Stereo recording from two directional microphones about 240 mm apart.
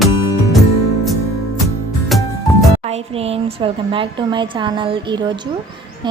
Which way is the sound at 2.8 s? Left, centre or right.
Right.